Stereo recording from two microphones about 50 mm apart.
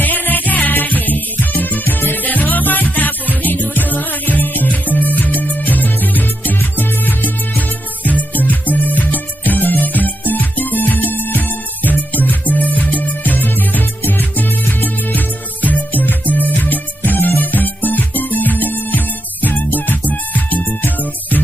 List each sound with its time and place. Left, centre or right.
0.0 s music: left